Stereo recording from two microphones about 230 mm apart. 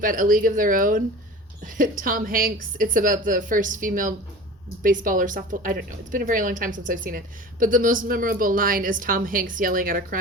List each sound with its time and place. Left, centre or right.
0.0 s a woman's voice: right